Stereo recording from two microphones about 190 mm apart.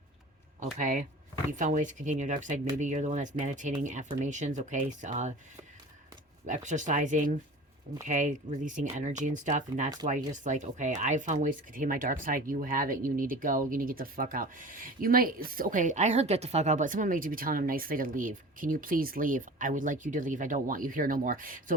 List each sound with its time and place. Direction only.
0.6 s speech: 40° right (ahead or behind)
6.4 s speech: 40° right (ahead or behind)